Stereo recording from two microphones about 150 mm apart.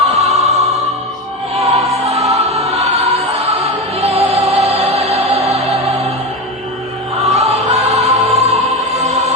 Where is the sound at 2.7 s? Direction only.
45° right (ahead or behind).